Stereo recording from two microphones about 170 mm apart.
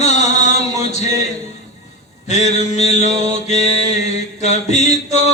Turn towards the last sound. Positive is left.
turn(degrees=40)  # may be behind; listen again after turning